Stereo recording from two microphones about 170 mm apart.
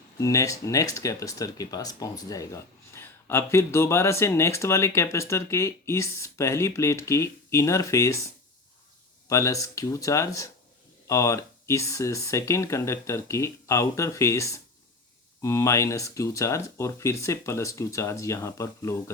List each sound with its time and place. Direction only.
0.2 s speech: 20° left (ahead or behind)
9.3 s speech: 20° left (ahead or behind)